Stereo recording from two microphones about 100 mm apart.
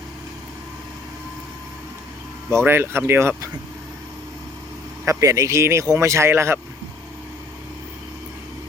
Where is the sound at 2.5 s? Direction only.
25° right (ahead or behind).